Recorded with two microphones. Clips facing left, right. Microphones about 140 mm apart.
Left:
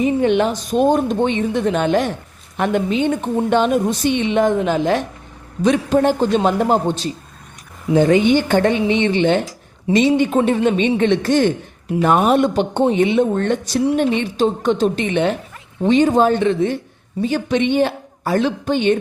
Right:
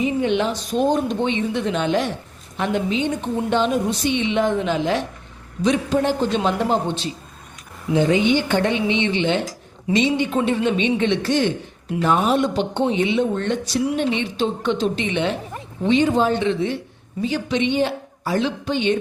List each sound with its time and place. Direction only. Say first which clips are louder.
0.0 s a woman's voice: left 4 dB; 50° left (ahead or behind)